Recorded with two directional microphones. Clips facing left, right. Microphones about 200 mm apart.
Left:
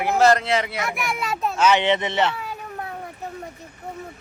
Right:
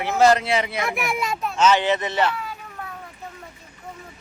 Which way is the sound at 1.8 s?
25° left (ahead or behind).